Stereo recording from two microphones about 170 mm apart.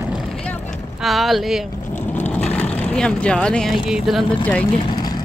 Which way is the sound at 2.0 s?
10° left (ahead or behind).